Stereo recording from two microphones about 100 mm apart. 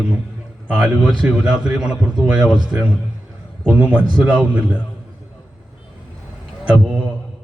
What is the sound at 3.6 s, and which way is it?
A man's voice, 10° right (ahead or behind).